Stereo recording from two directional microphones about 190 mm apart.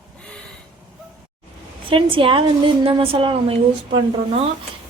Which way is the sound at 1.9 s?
25° right (ahead or behind).